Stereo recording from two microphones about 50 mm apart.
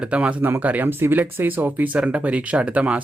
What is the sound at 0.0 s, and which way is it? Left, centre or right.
Speech, right.